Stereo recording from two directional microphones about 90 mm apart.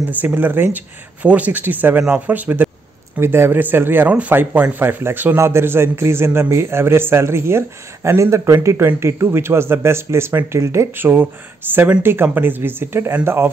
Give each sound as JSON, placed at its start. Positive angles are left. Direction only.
{"t": 0.2, "sound": "speech", "side_deg": -25}